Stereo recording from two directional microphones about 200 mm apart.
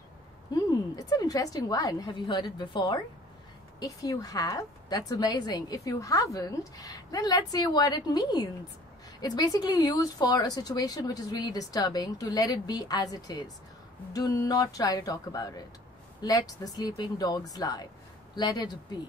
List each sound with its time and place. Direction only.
0.6 s a woman's voice: 15° left (ahead or behind)